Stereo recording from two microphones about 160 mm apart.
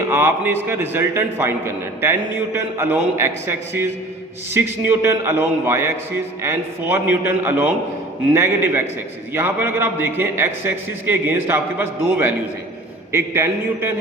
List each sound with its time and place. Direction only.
0.1 s a man's voice: 15° right (ahead or behind)